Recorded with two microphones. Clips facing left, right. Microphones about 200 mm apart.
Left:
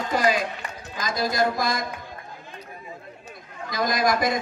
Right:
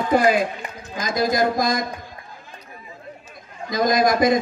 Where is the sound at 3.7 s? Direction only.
45° right (ahead or behind).